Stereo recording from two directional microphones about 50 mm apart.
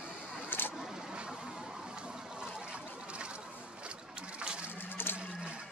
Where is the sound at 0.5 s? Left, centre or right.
Left.